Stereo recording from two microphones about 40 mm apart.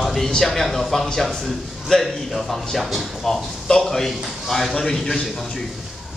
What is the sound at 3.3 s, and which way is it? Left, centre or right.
A man's voice, centre.